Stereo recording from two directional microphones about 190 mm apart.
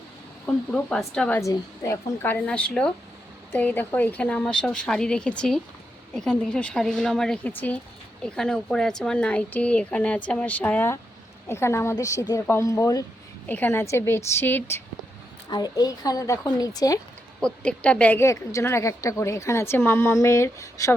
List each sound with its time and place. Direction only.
0.4 s a woman's voice: 5° left (ahead or behind)
1.4 s a woman's voice: 15° left (ahead or behind)
17.4 s a woman's voice: 5° left (ahead or behind)